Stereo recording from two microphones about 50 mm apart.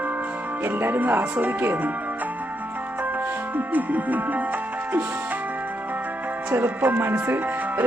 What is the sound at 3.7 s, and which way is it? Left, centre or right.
Speech, right.